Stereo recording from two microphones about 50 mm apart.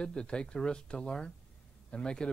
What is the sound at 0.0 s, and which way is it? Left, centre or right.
Speech, centre.